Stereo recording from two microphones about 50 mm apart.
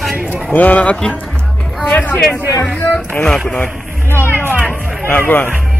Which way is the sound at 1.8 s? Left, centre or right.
Left.